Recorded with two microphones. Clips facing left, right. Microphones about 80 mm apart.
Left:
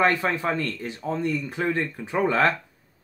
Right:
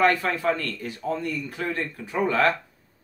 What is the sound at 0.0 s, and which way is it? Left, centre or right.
Speech, left.